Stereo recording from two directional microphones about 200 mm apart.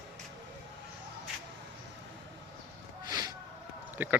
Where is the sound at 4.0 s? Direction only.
10° right (ahead or behind).